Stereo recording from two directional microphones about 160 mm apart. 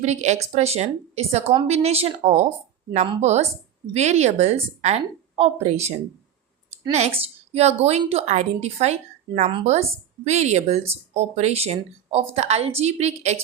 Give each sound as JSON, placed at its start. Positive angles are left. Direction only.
{"t": 0.0, "sound": "a woman's voice", "side_deg": -45}
{"t": 6.9, "sound": "a woman's voice", "side_deg": -40}